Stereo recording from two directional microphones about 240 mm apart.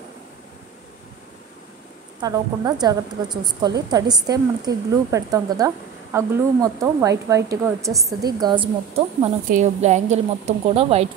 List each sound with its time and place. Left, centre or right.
2.1 s a woman's voice: centre
9.5 s a woman's voice: right